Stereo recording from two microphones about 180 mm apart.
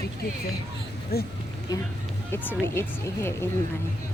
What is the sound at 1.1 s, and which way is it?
Speech, 60° left (ahead or behind).